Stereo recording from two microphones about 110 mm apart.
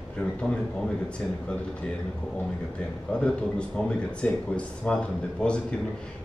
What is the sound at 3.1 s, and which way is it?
Speech, 10° left (ahead or behind).